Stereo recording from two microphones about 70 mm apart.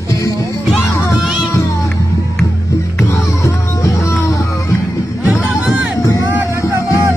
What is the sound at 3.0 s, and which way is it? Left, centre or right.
Music, left.